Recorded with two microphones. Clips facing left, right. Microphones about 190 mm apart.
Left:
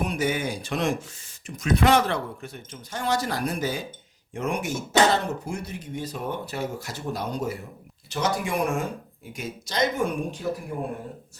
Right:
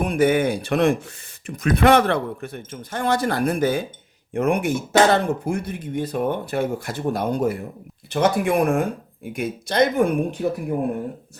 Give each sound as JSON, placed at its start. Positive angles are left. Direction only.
{"t": 0.0, "sound": "a man's voice", "side_deg": -55}